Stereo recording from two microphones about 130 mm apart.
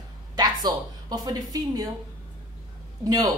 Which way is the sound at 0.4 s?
35° right (ahead or behind).